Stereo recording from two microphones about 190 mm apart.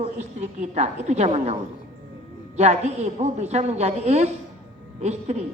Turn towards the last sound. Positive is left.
turn(degrees=-35)  # may be behind; listen again after turning